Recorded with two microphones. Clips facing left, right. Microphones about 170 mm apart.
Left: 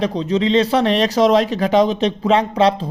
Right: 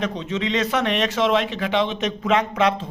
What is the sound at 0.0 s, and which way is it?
Speech, 35° left (ahead or behind).